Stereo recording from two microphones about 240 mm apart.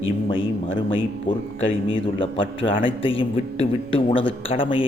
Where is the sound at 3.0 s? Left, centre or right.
Left.